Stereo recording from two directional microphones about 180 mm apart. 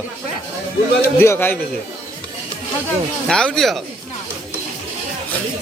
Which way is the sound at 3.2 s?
5° left (ahead or behind).